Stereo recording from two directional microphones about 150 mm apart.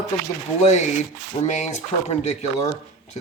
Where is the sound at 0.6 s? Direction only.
50° left (ahead or behind).